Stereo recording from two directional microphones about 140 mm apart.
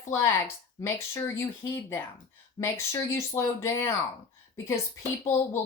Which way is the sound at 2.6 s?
20° left (ahead or behind).